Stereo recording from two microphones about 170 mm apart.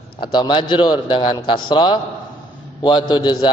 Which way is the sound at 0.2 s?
25° left (ahead or behind).